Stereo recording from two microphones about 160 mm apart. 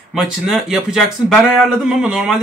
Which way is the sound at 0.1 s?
Centre (ahead or behind).